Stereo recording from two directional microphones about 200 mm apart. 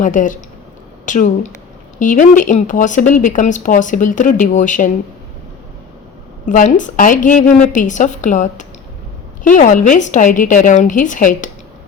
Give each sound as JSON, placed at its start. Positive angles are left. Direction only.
{"t": 0.0, "sound": "a woman's voice", "side_deg": 40}
{"t": 6.4, "sound": "speech", "side_deg": 40}